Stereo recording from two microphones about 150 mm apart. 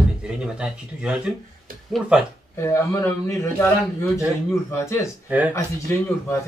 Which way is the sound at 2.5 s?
20° left (ahead or behind).